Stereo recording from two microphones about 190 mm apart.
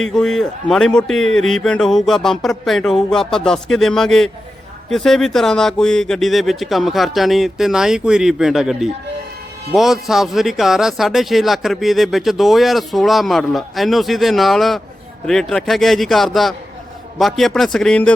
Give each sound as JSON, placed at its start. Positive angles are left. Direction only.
{"t": 0.0, "sound": "speech", "side_deg": 5}